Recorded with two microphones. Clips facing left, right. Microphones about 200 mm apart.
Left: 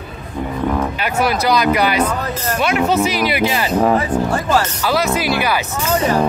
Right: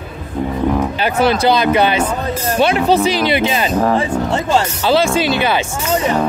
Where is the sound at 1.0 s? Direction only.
30° right (ahead or behind).